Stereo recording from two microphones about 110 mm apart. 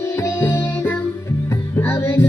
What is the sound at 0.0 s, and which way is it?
Music, 25° left (ahead or behind).